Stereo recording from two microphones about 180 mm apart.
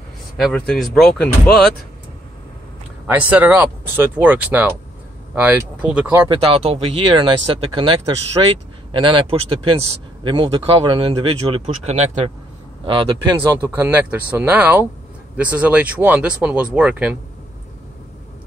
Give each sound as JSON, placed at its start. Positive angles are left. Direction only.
{"t": 0.4, "sound": "speech", "side_deg": 5}
{"t": 3.1, "sound": "speech", "side_deg": -10}
{"t": 6.2, "sound": "speech", "side_deg": -30}
{"t": 12.8, "sound": "speech", "side_deg": -30}